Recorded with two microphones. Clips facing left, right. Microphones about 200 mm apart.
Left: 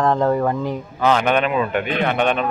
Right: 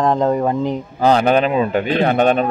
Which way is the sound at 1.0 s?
35° right (ahead or behind).